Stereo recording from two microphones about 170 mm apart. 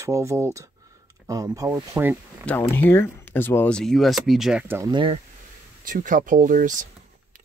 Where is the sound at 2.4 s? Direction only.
10° left (ahead or behind).